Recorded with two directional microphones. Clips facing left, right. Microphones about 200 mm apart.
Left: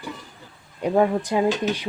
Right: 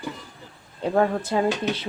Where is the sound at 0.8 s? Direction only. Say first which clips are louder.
Left 2 dB; 15° left (ahead or behind).